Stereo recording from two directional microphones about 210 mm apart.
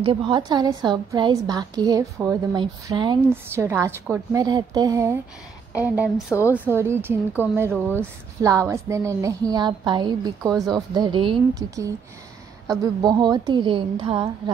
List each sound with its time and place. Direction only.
0.0 s a woman's voice: 25° right (ahead or behind)